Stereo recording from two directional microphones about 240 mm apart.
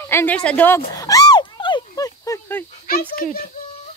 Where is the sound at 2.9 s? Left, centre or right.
Left.